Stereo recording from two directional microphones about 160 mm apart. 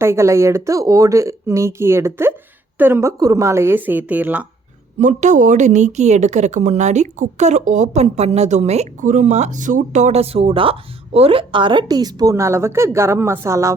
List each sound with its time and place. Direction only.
0.0 s speech: 15° right (ahead or behind)
4.9 s a woman's voice: 50° right (ahead or behind); by 13.7 s 20° right (ahead or behind)